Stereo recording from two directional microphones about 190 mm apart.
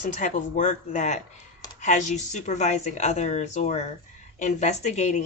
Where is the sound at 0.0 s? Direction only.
40° left (ahead or behind).